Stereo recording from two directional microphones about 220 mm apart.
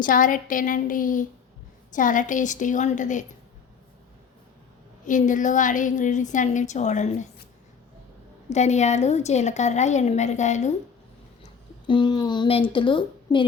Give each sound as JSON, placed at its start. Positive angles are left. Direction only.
{"t": 0.0, "sound": "a woman's voice", "side_deg": 40}
{"t": 5.0, "sound": "a woman's voice", "side_deg": 35}
{"t": 8.4, "sound": "a woman's voice", "side_deg": 30}
{"t": 11.9, "sound": "speech", "side_deg": 20}